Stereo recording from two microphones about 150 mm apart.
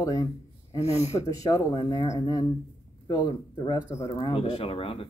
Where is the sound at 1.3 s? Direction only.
25° left (ahead or behind).